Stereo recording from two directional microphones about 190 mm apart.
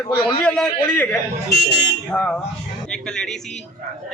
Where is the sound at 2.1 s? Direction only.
5° left (ahead or behind).